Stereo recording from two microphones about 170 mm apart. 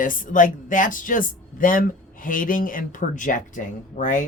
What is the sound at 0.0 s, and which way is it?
Speech, 50° left (ahead or behind).